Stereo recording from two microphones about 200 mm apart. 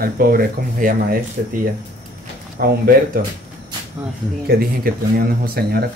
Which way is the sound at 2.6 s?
45° right (ahead or behind).